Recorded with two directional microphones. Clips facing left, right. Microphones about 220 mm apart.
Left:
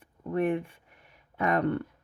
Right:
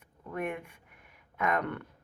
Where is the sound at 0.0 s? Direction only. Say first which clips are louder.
Left 8 dB; 30° left (ahead or behind).